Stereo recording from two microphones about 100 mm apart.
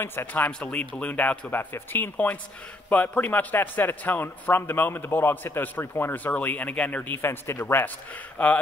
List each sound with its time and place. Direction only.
0.0 s a man's voice: 25° left (ahead or behind)
8.4 s speech: 10° left (ahead or behind)